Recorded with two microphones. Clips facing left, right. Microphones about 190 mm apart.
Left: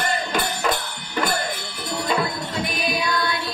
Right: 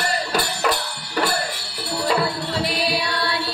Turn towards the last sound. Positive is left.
turn(degrees=-35)  # may be behind; listen again after turning